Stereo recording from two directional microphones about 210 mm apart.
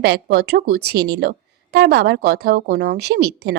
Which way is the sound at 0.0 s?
50° right (ahead or behind).